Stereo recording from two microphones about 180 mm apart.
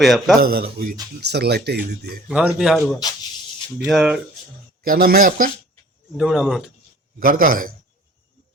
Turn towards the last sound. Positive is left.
turn(degrees=-50)  # may be behind; listen again after turning